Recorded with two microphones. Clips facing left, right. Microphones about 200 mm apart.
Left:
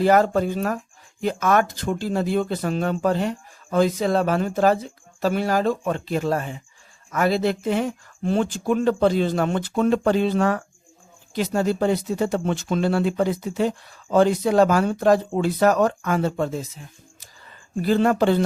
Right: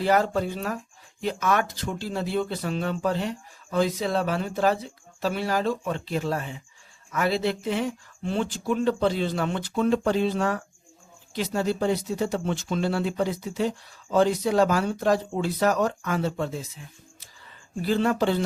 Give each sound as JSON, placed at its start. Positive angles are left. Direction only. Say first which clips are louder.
{"t": 0.0, "sound": "speech", "louder": "left 5 dB", "side_deg": 50}